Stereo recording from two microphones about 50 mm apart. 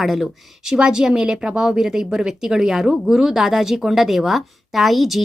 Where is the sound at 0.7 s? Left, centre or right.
Centre.